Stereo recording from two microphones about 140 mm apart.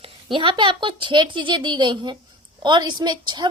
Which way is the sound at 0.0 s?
35° right (ahead or behind).